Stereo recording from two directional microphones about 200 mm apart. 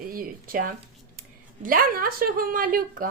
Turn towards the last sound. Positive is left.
turn(degrees=-45)  # may be behind; listen again after turning